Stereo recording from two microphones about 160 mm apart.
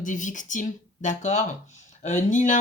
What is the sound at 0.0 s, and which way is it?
Speech, 50° left (ahead or behind).